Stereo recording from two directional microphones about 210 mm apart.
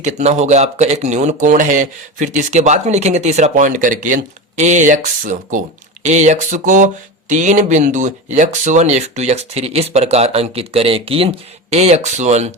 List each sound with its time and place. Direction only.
0.0 s speech: 30° right (ahead or behind)